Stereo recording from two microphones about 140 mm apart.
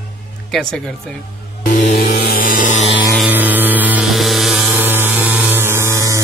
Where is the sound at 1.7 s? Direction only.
75° left (ahead or behind).